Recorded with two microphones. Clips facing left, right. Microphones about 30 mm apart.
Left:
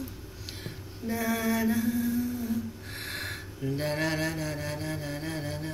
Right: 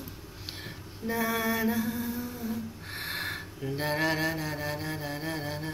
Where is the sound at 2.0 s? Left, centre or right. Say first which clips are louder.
Left 5 dB; right.